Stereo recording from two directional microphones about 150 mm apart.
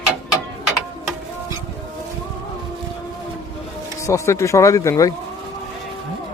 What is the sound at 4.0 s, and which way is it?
Speech, 20° left (ahead or behind).